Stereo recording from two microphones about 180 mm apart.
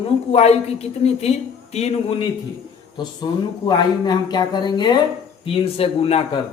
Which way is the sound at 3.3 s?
25° left (ahead or behind).